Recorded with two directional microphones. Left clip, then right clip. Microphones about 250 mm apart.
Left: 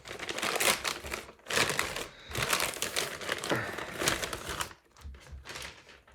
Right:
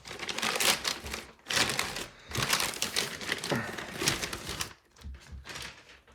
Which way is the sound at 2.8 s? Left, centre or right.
Centre.